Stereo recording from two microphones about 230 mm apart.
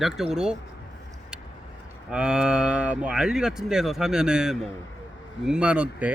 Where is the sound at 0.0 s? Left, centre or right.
Centre.